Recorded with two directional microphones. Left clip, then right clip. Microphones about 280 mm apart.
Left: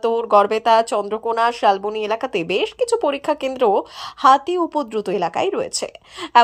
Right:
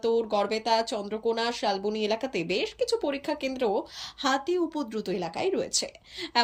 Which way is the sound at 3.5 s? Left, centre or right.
Left.